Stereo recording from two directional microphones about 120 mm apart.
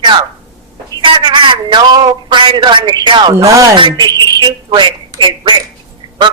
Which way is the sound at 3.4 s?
30° right (ahead or behind).